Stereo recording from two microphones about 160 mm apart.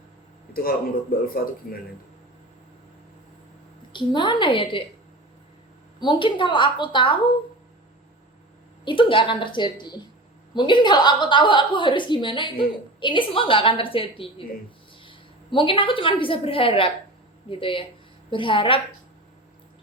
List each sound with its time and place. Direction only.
1.1 s speech: 70° left (ahead or behind)
3.9 s a woman's voice: 30° left (ahead or behind)
6.0 s a woman's voice: 30° left (ahead or behind)
8.8 s a woman's voice: 30° left (ahead or behind)